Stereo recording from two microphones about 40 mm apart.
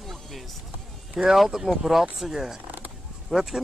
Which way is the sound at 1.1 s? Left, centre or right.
Centre.